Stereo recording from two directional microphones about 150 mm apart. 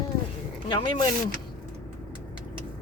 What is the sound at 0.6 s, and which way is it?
Speech, 30° left (ahead or behind).